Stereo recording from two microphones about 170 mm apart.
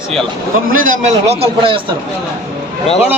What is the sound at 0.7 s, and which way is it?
A man's voice, 50° right (ahead or behind).